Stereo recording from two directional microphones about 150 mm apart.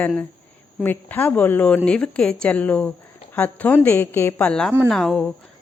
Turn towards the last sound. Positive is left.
turn(degrees=5)  # may be behind; listen again after turning